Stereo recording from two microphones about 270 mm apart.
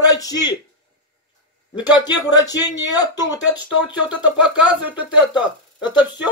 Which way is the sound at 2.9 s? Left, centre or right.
Centre.